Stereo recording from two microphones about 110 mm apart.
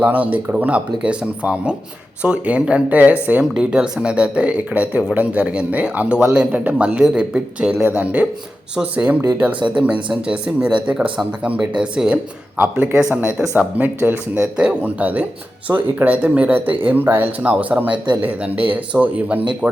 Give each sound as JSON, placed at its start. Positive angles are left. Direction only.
{"t": 0.1, "sound": "speech", "side_deg": -15}
{"t": 17.9, "sound": "speech", "side_deg": -45}
{"t": 18.2, "sound": "speech", "side_deg": -15}